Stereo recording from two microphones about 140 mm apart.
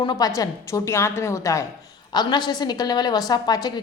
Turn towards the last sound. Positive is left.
turn(degrees=30)  # may be behind; listen again after turning